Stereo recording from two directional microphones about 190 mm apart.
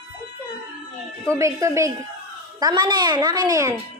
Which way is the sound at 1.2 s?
15° right (ahead or behind).